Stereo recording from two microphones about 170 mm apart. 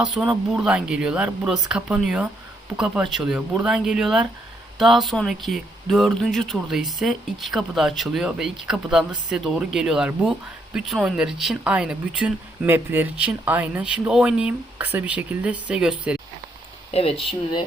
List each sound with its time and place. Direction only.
0.0 s speech: centre (ahead or behind)
16.9 s speech: 35° left (ahead or behind)